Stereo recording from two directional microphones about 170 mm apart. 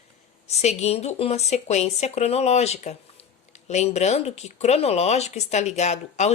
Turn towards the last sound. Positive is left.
turn(degrees=45)  # may be behind; listen again after turning